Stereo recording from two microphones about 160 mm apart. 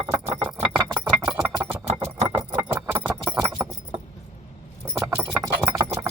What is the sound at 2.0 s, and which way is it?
Keys jangling, 15° right (ahead or behind).